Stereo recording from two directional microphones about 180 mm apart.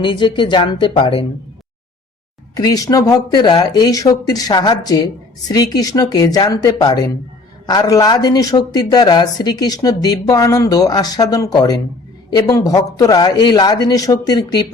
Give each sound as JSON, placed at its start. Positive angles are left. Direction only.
{"t": 0.0, "sound": "speech", "side_deg": 25}
{"t": 2.6, "sound": "speech", "side_deg": 20}